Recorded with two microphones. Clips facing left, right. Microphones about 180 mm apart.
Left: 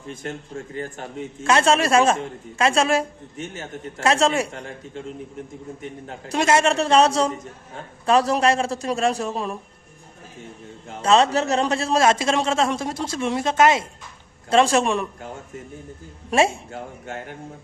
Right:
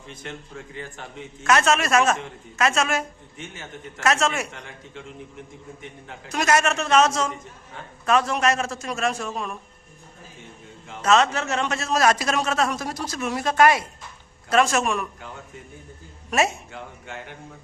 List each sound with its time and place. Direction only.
0.1 s a man's voice: 45° left (ahead or behind)
1.5 s a man's voice: 30° left (ahead or behind)
11.0 s a man's voice: 30° left (ahead or behind)
16.3 s a man's voice: 30° left (ahead or behind)
17.1 s a man's voice: 45° left (ahead or behind)